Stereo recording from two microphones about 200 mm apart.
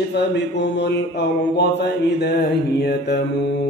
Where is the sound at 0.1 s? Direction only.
55° left (ahead or behind).